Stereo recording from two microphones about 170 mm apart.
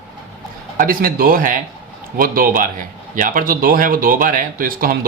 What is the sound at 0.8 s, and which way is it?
Speech, 55° right (ahead or behind).